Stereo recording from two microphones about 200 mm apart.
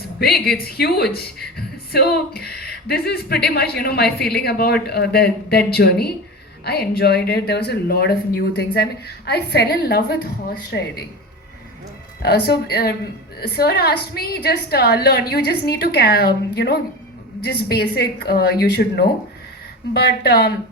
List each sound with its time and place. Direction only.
0.2 s speech: 50° left (ahead or behind)
12.2 s speech: 50° left (ahead or behind)